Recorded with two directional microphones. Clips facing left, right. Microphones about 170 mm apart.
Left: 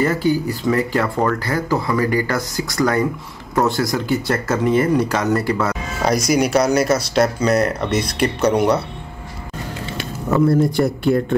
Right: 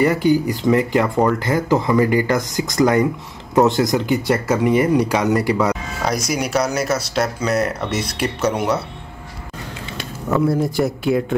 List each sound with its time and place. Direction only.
0.0 s speech: 15° right (ahead or behind)
6.0 s speech: centre (ahead or behind)
10.3 s speech: centre (ahead or behind)